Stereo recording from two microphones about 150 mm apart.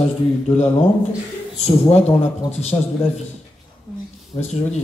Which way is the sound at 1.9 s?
45° left (ahead or behind).